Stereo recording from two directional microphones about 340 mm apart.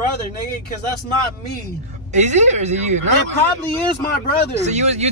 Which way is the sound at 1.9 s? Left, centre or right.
Centre.